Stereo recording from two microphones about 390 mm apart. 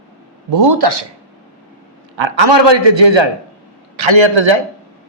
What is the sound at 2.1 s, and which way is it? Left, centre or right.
Speech, right.